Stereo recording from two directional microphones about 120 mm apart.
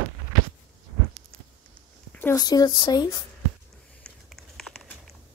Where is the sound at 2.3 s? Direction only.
35° left (ahead or behind).